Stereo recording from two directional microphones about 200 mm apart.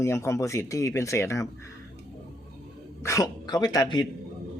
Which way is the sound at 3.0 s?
15° left (ahead or behind).